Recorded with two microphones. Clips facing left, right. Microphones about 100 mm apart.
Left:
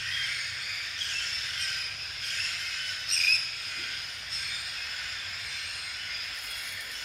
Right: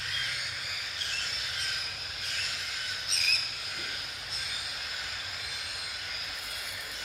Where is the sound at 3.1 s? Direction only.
Centre (ahead or behind).